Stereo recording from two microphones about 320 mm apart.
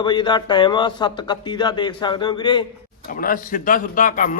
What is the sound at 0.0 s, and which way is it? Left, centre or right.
Speech, centre.